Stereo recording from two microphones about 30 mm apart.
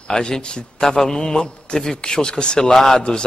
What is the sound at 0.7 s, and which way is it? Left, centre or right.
A man's voice, centre.